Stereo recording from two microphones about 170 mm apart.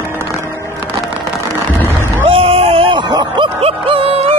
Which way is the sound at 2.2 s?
35° right (ahead or behind).